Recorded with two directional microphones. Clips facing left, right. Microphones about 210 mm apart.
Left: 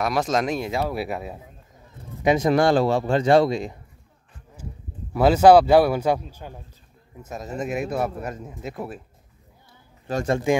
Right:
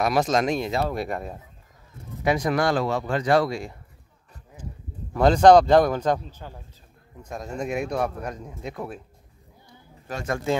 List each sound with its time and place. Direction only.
0.0 s speech: centre (ahead or behind)
2.2 s speech: 25° left (ahead or behind)
5.1 s a man's voice: 5° left (ahead or behind)
7.2 s speech: 5° left (ahead or behind)
10.1 s speech: 30° left (ahead or behind)
10.5 s a man's voice: 15° left (ahead or behind)